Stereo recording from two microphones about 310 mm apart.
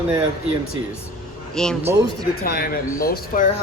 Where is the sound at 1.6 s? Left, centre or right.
Centre.